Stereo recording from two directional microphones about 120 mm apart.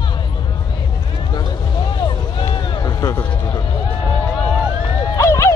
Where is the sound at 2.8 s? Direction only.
30° left (ahead or behind).